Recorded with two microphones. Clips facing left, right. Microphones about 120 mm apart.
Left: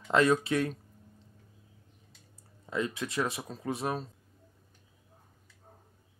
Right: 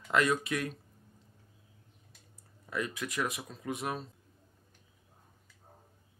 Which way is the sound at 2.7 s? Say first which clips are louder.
Left 3 dB; 25° left (ahead or behind).